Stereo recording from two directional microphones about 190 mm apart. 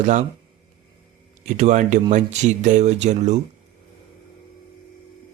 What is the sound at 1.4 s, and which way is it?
Speech, 40° right (ahead or behind).